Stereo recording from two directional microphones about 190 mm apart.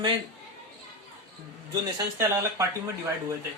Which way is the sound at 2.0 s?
20° right (ahead or behind).